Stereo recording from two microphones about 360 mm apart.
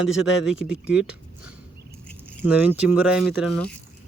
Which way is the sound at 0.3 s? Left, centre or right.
Left.